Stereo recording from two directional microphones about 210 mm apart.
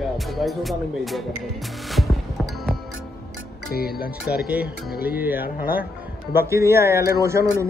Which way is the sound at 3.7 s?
45° left (ahead or behind).